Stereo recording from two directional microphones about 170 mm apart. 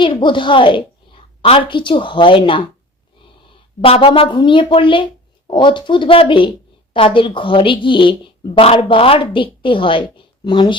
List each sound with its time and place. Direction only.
0.0 s a woman's voice: 30° left (ahead or behind)
3.8 s speech: 35° left (ahead or behind)